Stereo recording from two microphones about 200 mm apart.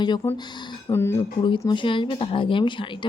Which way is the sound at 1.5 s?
25° left (ahead or behind).